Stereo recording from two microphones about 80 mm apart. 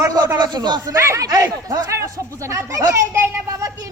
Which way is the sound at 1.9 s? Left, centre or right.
Right.